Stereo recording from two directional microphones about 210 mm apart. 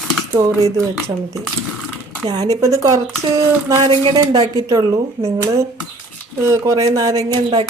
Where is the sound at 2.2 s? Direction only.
20° right (ahead or behind).